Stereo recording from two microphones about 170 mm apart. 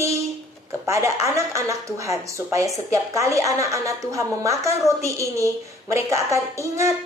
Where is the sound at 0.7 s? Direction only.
15° right (ahead or behind).